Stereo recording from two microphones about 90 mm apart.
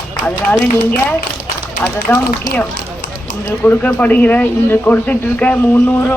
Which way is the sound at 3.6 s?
20° left (ahead or behind).